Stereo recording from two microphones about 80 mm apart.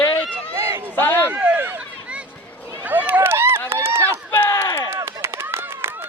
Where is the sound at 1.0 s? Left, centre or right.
Left.